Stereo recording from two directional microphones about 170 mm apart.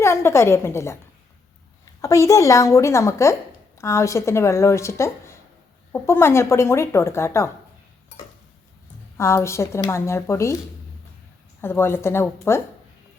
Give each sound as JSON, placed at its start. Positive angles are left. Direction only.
{"t": 0.0, "sound": "a woman's voice", "side_deg": 15}
{"t": 9.1, "sound": "speech", "side_deg": 15}
{"t": 11.6, "sound": "speech", "side_deg": 15}